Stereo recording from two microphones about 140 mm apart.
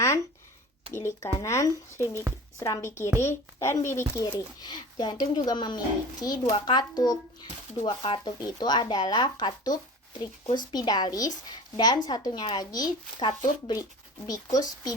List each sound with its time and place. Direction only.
0.9 s speech: 20° left (ahead or behind)